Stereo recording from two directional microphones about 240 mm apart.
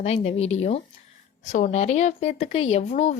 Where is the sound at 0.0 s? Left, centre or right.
Left.